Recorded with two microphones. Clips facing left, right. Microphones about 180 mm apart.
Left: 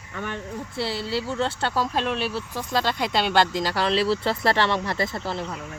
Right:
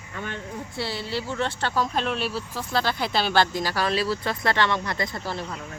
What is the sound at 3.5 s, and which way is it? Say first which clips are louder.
Speech: left 2 dB; 25° left (ahead or behind).